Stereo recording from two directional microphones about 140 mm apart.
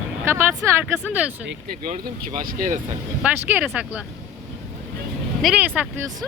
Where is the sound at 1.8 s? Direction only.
70° right (ahead or behind).